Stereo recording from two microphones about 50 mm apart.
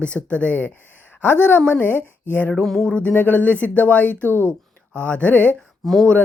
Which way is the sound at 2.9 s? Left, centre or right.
Left.